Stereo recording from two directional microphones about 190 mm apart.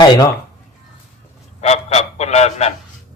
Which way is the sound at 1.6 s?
35° left (ahead or behind).